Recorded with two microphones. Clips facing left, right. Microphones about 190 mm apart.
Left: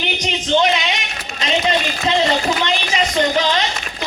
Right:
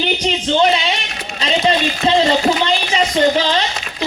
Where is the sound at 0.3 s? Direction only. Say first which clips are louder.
Right 1 dB; 30° right (ahead or behind).